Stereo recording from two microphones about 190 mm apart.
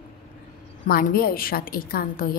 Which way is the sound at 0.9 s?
50° left (ahead or behind).